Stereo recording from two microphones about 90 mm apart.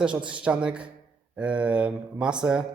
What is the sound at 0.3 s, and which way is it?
A man's voice, 10° right (ahead or behind).